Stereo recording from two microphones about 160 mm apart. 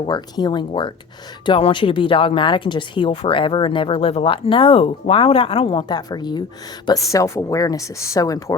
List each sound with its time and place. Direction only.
0.0 s speech: 25° left (ahead or behind)